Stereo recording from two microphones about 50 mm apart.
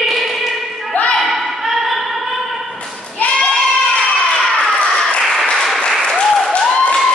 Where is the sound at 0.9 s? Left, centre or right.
Left.